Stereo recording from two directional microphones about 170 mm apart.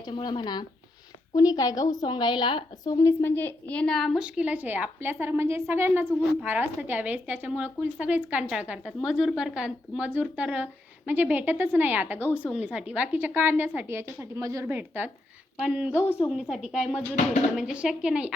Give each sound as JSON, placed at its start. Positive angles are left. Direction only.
{"t": 0.0, "sound": "a woman's voice", "side_deg": 25}